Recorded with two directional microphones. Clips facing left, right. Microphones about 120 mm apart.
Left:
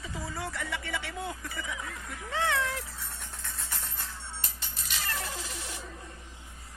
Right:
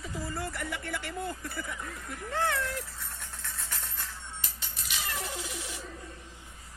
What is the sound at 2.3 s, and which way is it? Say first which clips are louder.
Speech: left 1 dB; 85° left.